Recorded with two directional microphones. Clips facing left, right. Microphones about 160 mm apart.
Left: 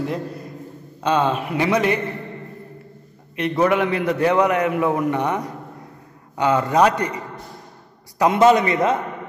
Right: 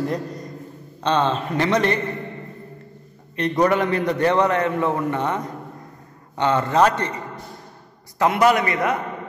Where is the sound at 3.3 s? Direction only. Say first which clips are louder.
Even; 5° left (ahead or behind); by 9.0 s 25° left (ahead or behind).